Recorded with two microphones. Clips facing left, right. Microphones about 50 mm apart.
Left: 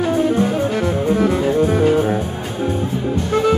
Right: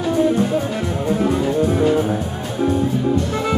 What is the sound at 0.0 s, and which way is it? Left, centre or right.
Music, left.